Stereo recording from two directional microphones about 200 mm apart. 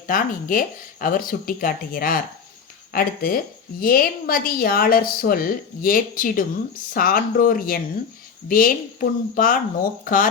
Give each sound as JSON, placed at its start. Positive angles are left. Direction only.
{"t": 0.1, "sound": "a woman's voice", "side_deg": 45}